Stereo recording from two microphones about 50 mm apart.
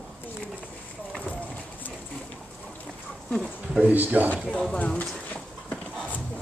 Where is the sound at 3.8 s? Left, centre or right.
Right.